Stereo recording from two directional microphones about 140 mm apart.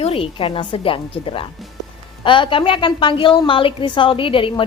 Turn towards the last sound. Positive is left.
turn(degrees=40)  # may be behind; listen again after turning